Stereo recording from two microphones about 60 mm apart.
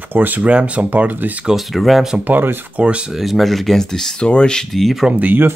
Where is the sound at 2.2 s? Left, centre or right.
Right.